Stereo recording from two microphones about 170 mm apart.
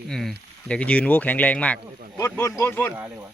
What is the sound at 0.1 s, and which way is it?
Speech, centre (ahead or behind).